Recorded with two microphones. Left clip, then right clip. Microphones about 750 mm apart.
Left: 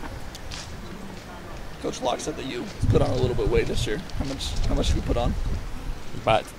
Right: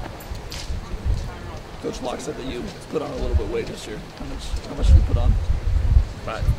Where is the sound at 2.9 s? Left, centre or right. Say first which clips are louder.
Left 3 dB; left.